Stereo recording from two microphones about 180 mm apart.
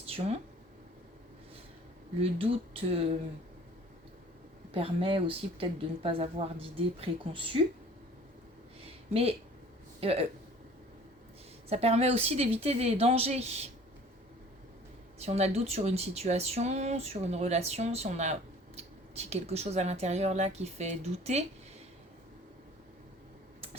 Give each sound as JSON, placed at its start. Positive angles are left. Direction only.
{"t": 0.0, "sound": "a sound", "side_deg": -35}
{"t": 2.2, "sound": "speech", "side_deg": -30}
{"t": 4.7, "sound": "speech", "side_deg": -30}
{"t": 10.0, "sound": "speech", "side_deg": -35}
{"t": 11.7, "sound": "speech", "side_deg": -35}
{"t": 15.2, "sound": "speech", "side_deg": -35}